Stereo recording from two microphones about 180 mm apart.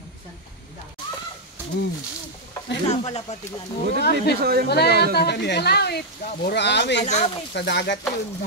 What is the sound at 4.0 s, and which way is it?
Speech, 65° left (ahead or behind).